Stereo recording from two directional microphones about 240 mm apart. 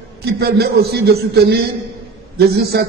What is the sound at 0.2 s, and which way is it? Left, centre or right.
A man's voice, right.